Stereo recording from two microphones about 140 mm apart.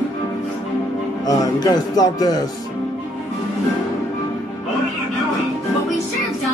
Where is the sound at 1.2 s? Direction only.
25° left (ahead or behind).